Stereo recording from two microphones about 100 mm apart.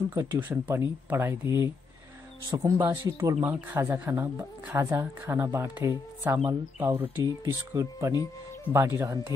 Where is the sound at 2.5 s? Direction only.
35° right (ahead or behind).